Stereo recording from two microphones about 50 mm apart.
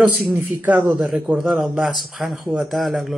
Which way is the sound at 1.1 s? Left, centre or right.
Right.